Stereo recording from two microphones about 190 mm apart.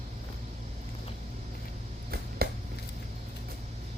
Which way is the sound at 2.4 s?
55° right (ahead or behind).